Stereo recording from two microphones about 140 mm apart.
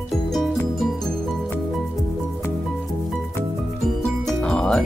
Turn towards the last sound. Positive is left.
turn(degrees=5)  # may be behind; listen again after turning